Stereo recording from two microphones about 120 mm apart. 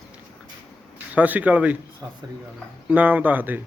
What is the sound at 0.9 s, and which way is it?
Speech, 15° right (ahead or behind).